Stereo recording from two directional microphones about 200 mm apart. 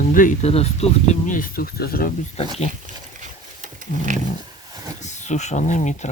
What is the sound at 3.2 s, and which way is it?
Roaring cats, 40° right (ahead or behind).